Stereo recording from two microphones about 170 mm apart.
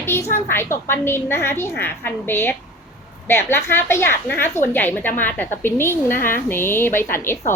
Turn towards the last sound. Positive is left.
turn(degrees=15)  # may be behind; listen again after turning